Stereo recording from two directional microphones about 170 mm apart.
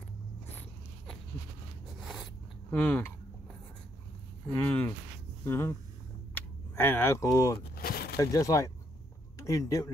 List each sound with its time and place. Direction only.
2.7 s speech: 10° left (ahead or behind)
4.5 s speech: 15° left (ahead or behind)
7.7 s a sound: 65° left (ahead or behind)
8.2 s speech: 20° left (ahead or behind)